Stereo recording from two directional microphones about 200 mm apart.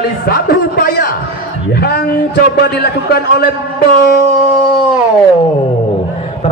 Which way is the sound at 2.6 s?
55° left (ahead or behind).